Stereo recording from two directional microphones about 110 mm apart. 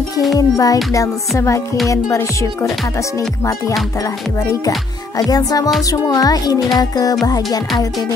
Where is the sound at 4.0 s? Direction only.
30° left (ahead or behind).